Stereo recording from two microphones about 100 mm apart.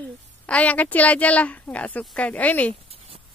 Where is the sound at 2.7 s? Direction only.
75° right (ahead or behind).